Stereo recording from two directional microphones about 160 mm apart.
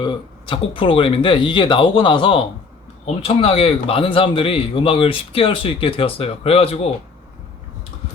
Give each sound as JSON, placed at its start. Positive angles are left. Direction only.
{"t": 0.0, "sound": "a man's voice", "side_deg": 30}